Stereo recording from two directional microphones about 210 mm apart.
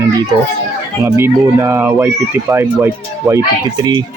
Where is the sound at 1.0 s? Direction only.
10° right (ahead or behind).